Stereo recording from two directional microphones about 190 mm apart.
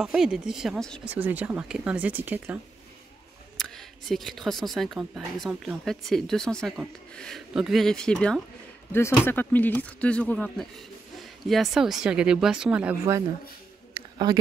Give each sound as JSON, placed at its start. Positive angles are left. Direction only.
{"t": 0.0, "sound": "speech", "side_deg": -5}
{"t": 1.1, "sound": "speech", "side_deg": -10}
{"t": 3.5, "sound": "speech", "side_deg": 0}
{"t": 14.3, "sound": "speech", "side_deg": -20}